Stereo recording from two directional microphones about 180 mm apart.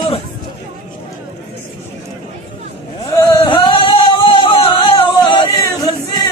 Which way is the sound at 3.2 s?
25° left (ahead or behind).